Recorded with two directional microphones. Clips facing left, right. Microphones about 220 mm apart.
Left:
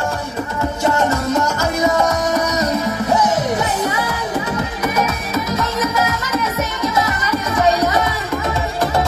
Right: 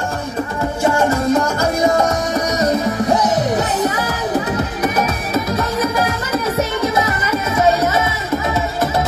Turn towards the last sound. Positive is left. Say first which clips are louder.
# right 1 dB
turn(degrees=-25)  # may be behind; listen again after turning